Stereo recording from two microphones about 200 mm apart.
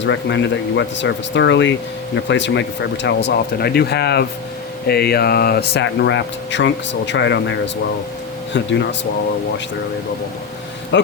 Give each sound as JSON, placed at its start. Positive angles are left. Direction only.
{"t": 0.0, "sound": "speech", "side_deg": 65}
{"t": 10.9, "sound": "speech", "side_deg": 60}